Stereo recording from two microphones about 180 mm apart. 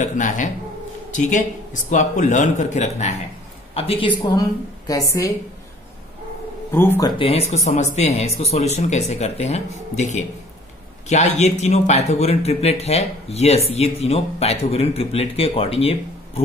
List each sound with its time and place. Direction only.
0.0 s a man's voice: 45° left (ahead or behind); by 5.0 s 20° left (ahead or behind)
6.7 s speech: 15° left (ahead or behind); by 16.4 s 35° left (ahead or behind)